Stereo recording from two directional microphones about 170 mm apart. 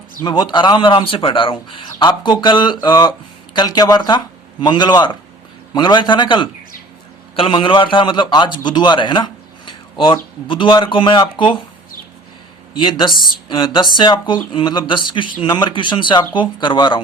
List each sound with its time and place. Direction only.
0.2 s a man's voice: 25° left (ahead or behind)
12.8 s a man's voice: 25° left (ahead or behind)